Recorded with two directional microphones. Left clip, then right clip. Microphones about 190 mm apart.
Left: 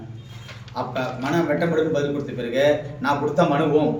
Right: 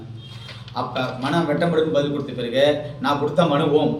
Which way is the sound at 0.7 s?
20° right (ahead or behind).